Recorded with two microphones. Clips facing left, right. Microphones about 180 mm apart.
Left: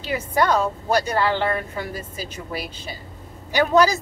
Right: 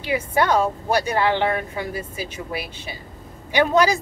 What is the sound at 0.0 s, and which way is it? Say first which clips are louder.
A woman's voice: right 1 dB; 10° right (ahead or behind).